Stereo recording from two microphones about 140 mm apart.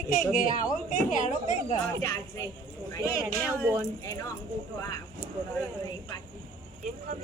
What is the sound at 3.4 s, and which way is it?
Speech, 15° right (ahead or behind).